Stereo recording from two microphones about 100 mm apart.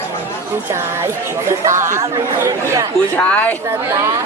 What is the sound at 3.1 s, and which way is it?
Speech, 15° left (ahead or behind).